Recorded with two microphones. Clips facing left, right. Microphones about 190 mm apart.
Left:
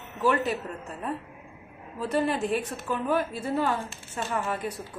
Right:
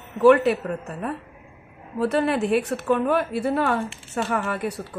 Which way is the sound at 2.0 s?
70° right (ahead or behind).